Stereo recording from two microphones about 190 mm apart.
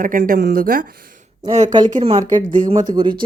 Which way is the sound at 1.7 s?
25° right (ahead or behind).